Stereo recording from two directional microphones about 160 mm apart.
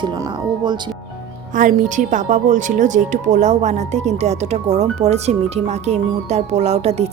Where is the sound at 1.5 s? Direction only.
50° right (ahead or behind).